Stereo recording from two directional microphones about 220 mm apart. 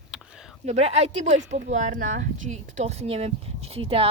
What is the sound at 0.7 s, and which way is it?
Speech, 30° right (ahead or behind).